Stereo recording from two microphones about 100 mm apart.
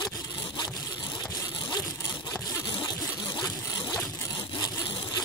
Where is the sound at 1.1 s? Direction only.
40° left (ahead or behind).